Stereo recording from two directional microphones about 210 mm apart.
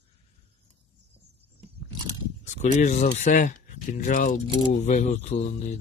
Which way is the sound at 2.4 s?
35° left (ahead or behind).